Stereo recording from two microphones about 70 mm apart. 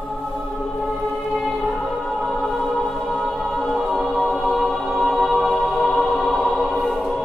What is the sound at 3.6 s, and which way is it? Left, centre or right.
Music, centre.